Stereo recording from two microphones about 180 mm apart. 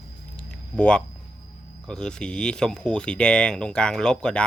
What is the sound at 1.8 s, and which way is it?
Speech, 5° left (ahead or behind).